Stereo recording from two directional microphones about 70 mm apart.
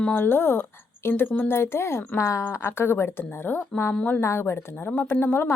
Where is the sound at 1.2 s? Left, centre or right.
Left.